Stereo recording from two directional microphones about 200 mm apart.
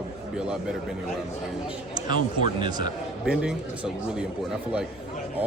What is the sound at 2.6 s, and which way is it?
Speech, 20° right (ahead or behind).